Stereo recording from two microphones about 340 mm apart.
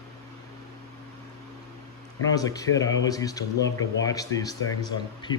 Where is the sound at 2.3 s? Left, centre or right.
Centre.